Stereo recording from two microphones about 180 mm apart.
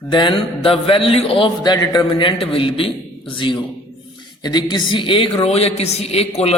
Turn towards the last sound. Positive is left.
turn(degrees=35)  # may be behind; listen again after turning